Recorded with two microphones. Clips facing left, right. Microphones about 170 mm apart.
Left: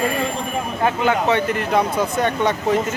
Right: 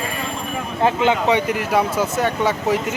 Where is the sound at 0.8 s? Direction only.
15° right (ahead or behind).